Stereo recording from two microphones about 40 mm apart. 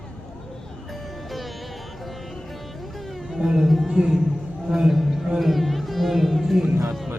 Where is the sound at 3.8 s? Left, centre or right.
Centre.